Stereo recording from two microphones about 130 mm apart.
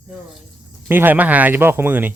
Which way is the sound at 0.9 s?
15° right (ahead or behind).